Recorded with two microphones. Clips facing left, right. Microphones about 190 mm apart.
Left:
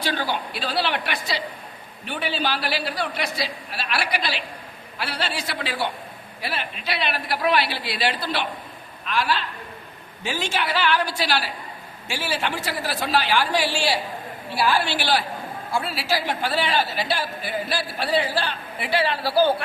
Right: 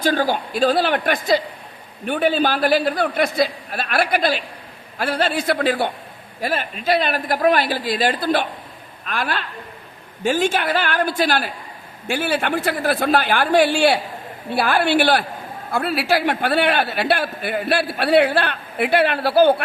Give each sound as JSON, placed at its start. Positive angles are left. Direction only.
{"t": 0.0, "sound": "a man's voice", "side_deg": -45}